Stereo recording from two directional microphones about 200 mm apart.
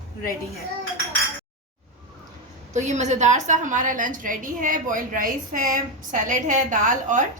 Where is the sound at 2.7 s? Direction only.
35° right (ahead or behind).